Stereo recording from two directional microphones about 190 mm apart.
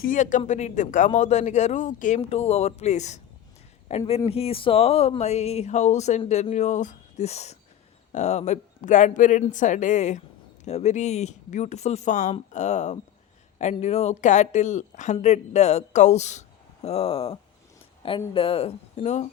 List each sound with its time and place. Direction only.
0.0 s speech: 45° left (ahead or behind)